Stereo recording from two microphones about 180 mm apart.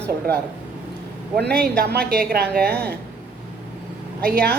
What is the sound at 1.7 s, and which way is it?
A woman's voice, 60° right (ahead or behind).